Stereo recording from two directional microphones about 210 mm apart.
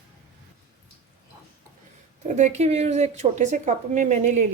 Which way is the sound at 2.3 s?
35° right (ahead or behind).